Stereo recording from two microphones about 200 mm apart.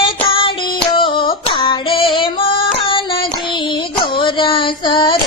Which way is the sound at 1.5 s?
25° left (ahead or behind).